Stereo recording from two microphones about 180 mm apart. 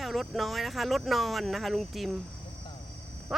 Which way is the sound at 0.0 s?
Centre (ahead or behind).